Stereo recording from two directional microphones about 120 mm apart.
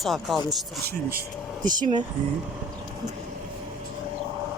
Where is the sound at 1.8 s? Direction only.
85° right.